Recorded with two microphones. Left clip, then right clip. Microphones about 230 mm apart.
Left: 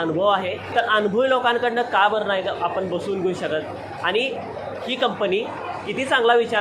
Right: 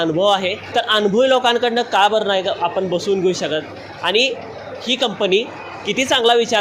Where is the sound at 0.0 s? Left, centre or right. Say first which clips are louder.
Right 4 dB; right.